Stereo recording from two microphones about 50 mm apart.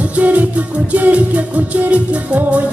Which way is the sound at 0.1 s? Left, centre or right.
Right.